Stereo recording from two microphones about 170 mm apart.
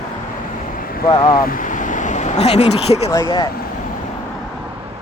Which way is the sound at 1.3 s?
55° left (ahead or behind).